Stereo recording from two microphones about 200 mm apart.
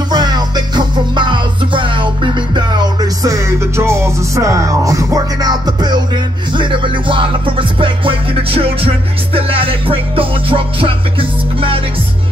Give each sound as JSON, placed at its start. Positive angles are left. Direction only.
{"t": 0.1, "sound": "music", "side_deg": -20}